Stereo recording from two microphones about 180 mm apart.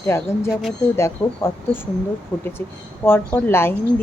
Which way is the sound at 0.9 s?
15° left (ahead or behind).